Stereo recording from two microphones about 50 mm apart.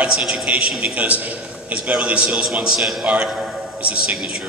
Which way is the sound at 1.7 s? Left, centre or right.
Centre.